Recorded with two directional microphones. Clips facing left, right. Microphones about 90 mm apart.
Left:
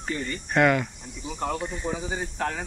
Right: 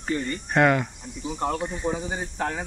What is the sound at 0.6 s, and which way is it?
Speech, 25° right (ahead or behind).